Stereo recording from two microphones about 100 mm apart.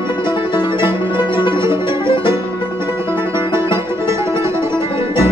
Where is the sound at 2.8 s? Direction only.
25° right (ahead or behind).